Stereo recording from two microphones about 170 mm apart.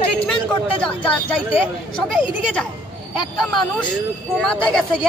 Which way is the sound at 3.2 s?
Centre (ahead or behind).